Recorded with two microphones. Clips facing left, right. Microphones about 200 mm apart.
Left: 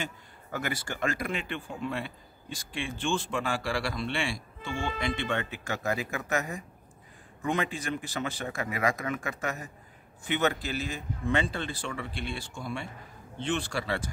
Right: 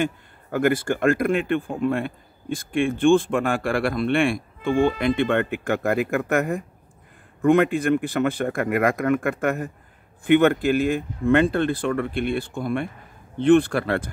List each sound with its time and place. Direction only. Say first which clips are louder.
0.0 s speech: right 13 dB; 55° right (ahead or behind)